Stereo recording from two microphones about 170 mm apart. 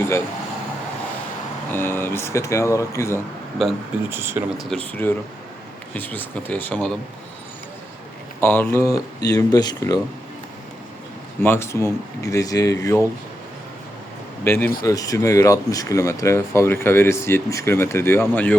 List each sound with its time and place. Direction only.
1.7 s speech: 10° left (ahead or behind)
3.6 s speech: centre (ahead or behind)
4.1 s speech: 15° right (ahead or behind)
4.5 s speech: 5° left (ahead or behind)
8.4 s speech: 10° left (ahead or behind)
11.4 s speech: 15° left (ahead or behind)
14.4 s speech: 15° left (ahead or behind)